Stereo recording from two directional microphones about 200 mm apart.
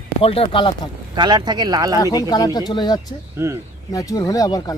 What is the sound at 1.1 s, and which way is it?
Speech, 20° right (ahead or behind).